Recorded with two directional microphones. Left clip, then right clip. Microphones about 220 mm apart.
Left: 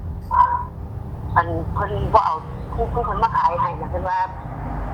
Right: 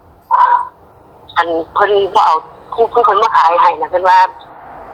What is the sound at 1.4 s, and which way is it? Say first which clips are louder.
A man's voice: right 8 dB; 40° right (ahead or behind).